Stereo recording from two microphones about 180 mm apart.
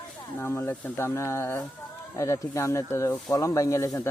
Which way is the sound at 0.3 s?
15° left (ahead or behind).